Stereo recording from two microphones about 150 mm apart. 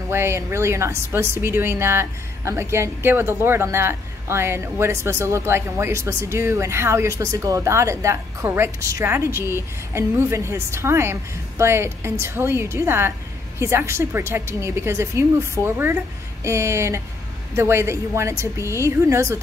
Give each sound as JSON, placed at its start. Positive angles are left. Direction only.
{"t": 0.1, "sound": "a woman's voice", "side_deg": -15}